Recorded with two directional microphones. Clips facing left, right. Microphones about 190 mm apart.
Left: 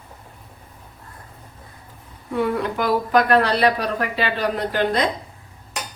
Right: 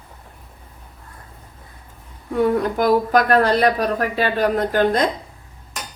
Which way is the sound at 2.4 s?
45° right (ahead or behind).